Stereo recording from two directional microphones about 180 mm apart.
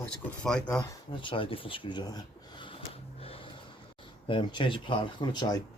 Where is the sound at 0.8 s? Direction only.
25° left (ahead or behind).